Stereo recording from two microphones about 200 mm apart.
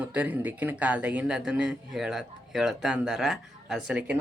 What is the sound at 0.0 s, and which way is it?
Speech, 10° right (ahead or behind).